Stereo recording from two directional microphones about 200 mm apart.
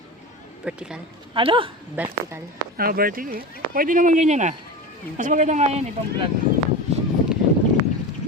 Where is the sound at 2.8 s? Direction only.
45° right (ahead or behind).